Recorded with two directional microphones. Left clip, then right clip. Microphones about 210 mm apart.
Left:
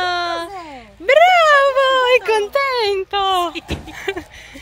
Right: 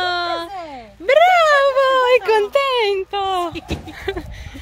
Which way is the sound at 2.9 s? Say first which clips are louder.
Left 2 dB; centre (ahead or behind).